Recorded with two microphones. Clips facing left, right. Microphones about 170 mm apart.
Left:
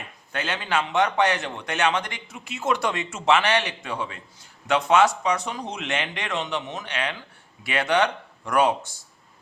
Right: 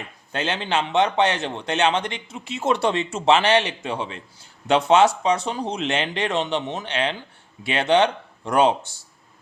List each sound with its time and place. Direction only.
0.3 s a man's voice: 25° right (ahead or behind)